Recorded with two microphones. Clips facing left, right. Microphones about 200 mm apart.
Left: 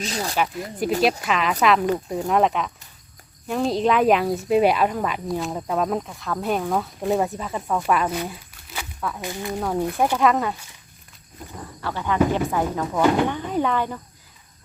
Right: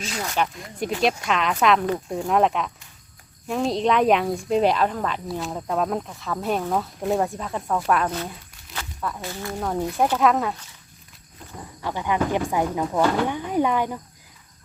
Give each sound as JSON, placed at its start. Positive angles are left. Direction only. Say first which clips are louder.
{"t": 0.0, "sound": "speech", "louder": "left 3 dB", "side_deg": 35}
{"t": 0.3, "sound": "speech", "louder": "even", "side_deg": 5}
{"t": 9.0, "sound": "speech", "louder": "left 1 dB", "side_deg": 0}
{"t": 9.2, "sound": "speech", "louder": "left 3 dB", "side_deg": 15}
{"t": 9.6, "sound": "speech", "louder": "left 1 dB", "side_deg": 0}
{"t": 11.8, "sound": "speech", "louder": "left 3 dB", "side_deg": -15}